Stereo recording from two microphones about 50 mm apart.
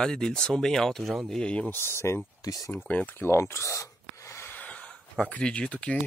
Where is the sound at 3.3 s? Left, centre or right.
Left.